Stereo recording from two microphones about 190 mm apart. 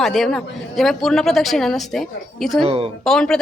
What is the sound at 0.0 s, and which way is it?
A woman's voice, centre (ahead or behind).